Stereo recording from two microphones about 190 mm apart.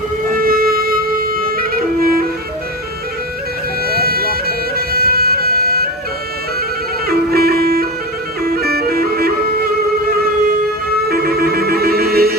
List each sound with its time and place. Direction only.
0.3 s music: 50° right (ahead or behind)
3.8 s bagpipes: 55° right (ahead or behind)
7.1 s music: 55° right (ahead or behind)
8.4 s bagpipes: 55° right (ahead or behind)
11.1 s music: 55° right (ahead or behind)